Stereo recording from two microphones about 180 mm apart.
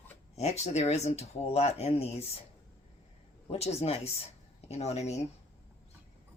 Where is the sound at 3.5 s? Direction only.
35° left (ahead or behind).